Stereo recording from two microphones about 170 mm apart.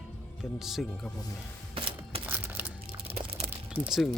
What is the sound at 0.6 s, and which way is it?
Speech, centre (ahead or behind).